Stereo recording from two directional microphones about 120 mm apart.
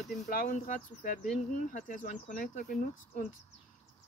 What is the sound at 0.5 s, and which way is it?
Speech, 90° left.